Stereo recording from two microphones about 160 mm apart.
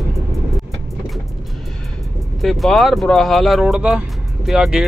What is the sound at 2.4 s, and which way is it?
Speech, centre (ahead or behind).